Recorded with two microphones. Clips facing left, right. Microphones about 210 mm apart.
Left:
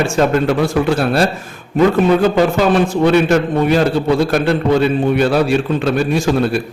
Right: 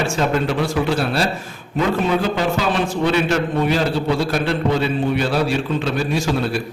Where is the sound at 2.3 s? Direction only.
50° left (ahead or behind).